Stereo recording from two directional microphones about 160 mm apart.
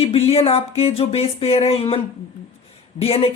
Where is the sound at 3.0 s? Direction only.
35° left (ahead or behind).